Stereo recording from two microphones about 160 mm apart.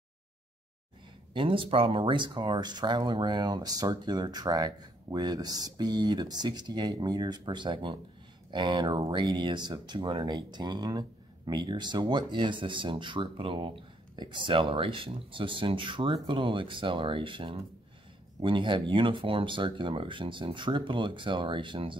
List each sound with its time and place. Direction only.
1.3 s speech: 30° right (ahead or behind)